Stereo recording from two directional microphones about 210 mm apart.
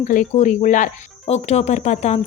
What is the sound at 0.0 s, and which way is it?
Speech, 35° left (ahead or behind).